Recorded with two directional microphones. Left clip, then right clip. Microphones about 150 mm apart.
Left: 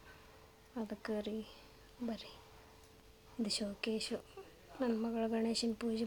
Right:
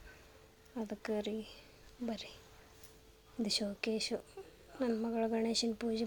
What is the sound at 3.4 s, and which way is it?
Speech, 20° right (ahead or behind).